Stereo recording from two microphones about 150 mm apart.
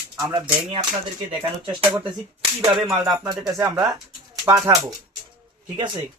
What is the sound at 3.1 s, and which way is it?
Speech, 5° right (ahead or behind).